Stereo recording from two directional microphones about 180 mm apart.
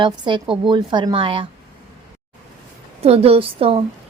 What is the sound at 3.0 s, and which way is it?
Speech, 35° right (ahead or behind).